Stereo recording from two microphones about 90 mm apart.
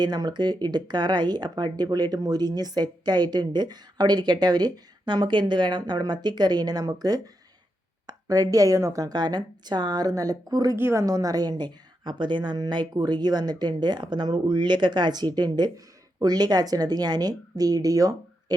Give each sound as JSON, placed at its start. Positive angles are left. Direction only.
{"t": 0.0, "sound": "speech", "side_deg": -50}
{"t": 10.8, "sound": "a woman's voice", "side_deg": -25}
{"t": 11.0, "sound": "speech", "side_deg": -40}